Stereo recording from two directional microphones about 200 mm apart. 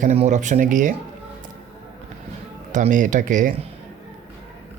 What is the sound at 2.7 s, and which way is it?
Speech, 40° right (ahead or behind).